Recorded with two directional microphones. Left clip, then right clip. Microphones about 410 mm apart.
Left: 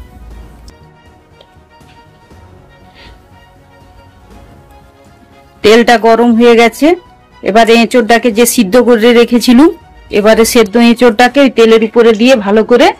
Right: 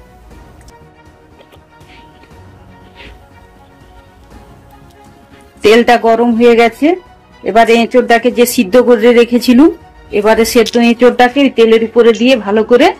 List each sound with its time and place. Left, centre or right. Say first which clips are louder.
5.6 s speech: left 2 dB; left